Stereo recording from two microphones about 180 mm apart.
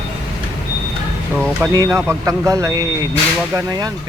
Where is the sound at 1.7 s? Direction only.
15° right (ahead or behind).